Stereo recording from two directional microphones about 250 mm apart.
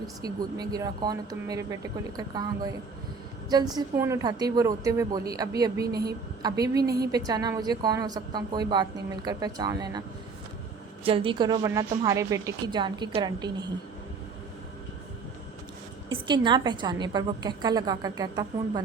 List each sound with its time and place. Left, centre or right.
0.2 s a woman's voice: centre
3.8 s a woman's voice: centre
5.8 s a woman's voice: right
6.4 s a woman's voice: centre
11.0 s a woman's voice: right
16.0 s a woman's voice: centre